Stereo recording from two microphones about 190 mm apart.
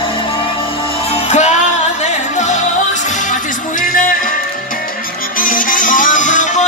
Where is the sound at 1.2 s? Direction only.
35° left (ahead or behind).